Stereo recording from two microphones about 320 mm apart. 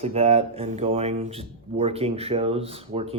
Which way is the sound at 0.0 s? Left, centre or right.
Centre.